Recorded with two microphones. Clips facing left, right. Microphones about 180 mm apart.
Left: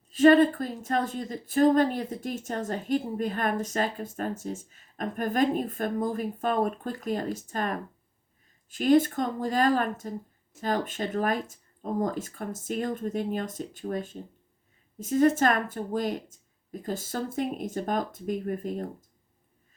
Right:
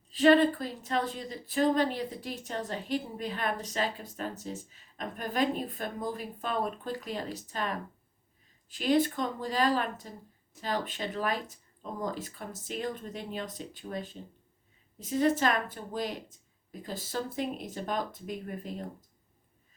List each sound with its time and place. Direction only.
0.1 s speech: 45° left (ahead or behind)